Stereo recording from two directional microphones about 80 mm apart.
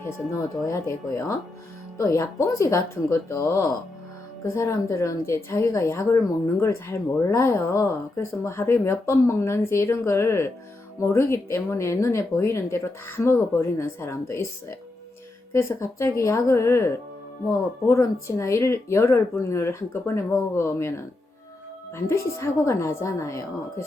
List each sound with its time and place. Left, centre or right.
0.0 s speech: left